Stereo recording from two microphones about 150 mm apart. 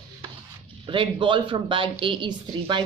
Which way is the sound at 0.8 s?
35° right (ahead or behind).